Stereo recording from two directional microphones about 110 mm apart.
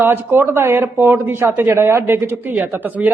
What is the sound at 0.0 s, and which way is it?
Speech, 20° right (ahead or behind).